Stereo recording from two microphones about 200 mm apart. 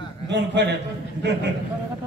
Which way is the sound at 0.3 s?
60° right (ahead or behind).